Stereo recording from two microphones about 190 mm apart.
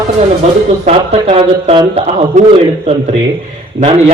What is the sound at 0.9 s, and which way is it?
Speech, 30° right (ahead or behind).